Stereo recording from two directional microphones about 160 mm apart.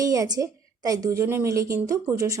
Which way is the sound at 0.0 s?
20° right (ahead or behind).